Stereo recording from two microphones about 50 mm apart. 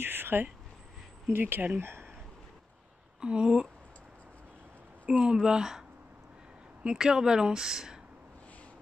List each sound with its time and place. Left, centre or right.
0.0 s a sound: right
1.3 s speech: right
1.8 s speech: right
3.2 s speech: centre
5.2 s speech: centre